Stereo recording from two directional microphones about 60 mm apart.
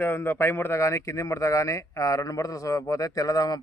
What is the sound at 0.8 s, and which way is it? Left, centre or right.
A man's voice, left.